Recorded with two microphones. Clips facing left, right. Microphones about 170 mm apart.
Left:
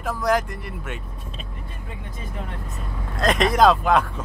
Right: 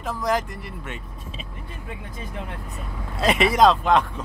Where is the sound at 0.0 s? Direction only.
Centre (ahead or behind).